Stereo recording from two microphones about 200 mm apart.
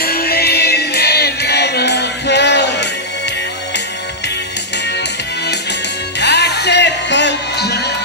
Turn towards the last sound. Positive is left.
turn(degrees=60)  # may be behind; listen again after turning